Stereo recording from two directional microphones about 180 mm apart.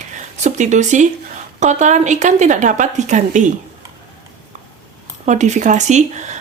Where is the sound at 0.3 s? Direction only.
40° right (ahead or behind).